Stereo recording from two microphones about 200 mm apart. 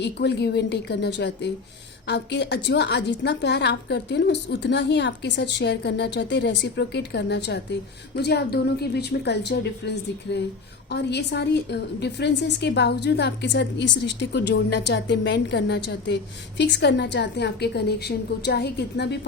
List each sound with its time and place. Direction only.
0.0 s a woman's voice: 55° left (ahead or behind)